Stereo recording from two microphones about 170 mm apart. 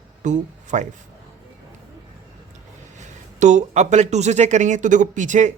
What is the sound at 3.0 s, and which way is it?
Speech, 45° right (ahead or behind).